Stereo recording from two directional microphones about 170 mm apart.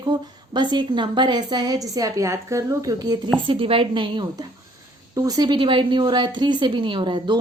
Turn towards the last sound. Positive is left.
turn(degrees=-25)  # may be behind; listen again after turning